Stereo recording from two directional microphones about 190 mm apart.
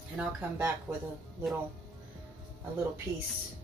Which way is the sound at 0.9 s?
15° right (ahead or behind).